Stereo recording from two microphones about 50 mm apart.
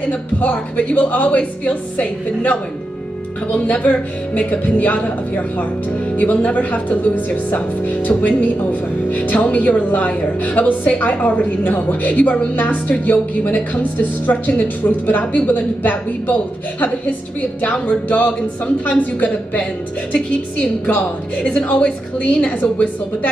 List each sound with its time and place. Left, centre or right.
0.1 s a woman's voice: left
3.8 s a woman's voice: left
17.8 s a woman's voice: left
21.7 s a woman's voice: left